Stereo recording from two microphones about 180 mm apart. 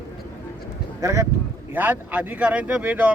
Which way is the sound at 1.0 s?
15° right (ahead or behind).